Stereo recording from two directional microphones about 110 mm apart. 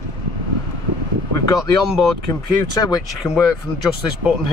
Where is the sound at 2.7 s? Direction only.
35° left (ahead or behind).